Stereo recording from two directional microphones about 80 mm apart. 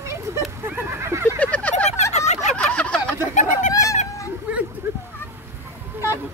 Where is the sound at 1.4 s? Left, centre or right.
Centre.